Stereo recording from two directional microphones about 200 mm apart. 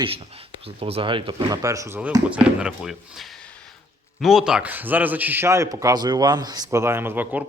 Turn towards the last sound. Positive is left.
turn(degrees=-10)  # may be behind; listen again after turning